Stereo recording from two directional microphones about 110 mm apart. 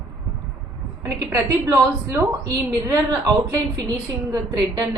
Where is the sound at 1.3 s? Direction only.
30° right (ahead or behind).